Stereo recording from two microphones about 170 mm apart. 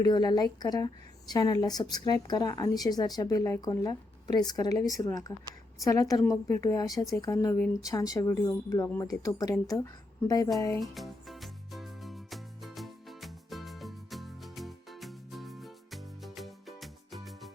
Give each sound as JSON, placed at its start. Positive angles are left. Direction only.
{"t": 0.0, "sound": "a woman's voice", "side_deg": 25}
{"t": 10.8, "sound": "music", "side_deg": 0}